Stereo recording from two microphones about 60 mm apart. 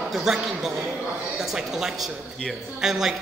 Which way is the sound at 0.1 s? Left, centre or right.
Centre.